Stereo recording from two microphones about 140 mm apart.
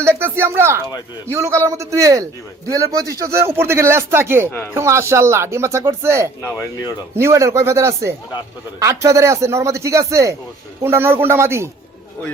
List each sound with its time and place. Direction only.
0.0 s a sound: 15° right (ahead or behind)
0.3 s a man's voice: 15° right (ahead or behind)
4.4 s speech: 15° left (ahead or behind)
4.7 s a man's voice: 20° right (ahead or behind)